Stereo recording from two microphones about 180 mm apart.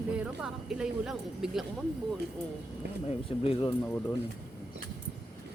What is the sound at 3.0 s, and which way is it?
Speech, 35° left (ahead or behind).